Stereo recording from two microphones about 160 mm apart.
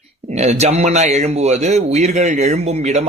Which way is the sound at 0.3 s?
45° right (ahead or behind).